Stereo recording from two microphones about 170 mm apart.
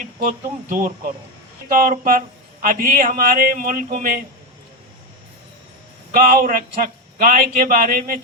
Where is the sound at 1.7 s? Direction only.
55° right (ahead or behind).